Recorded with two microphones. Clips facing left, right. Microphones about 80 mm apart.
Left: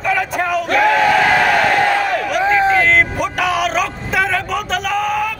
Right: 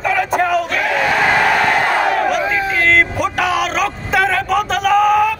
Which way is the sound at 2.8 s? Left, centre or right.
Centre.